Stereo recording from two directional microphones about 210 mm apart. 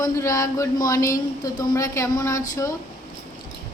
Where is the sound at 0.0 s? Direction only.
15° left (ahead or behind).